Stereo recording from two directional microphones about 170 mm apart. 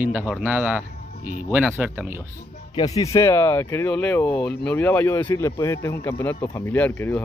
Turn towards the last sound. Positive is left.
turn(degrees=10)  # may be behind; listen again after turning